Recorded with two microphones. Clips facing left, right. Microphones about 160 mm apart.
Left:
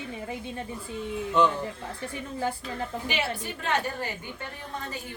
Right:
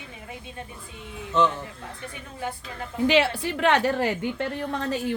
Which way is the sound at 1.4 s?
10° left (ahead or behind).